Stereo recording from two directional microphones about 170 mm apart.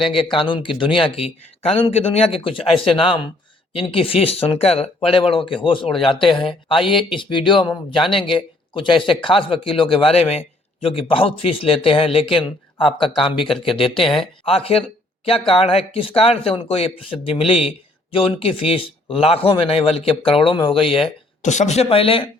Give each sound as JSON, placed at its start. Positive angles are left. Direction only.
{"t": 0.3, "sound": "speech", "side_deg": 30}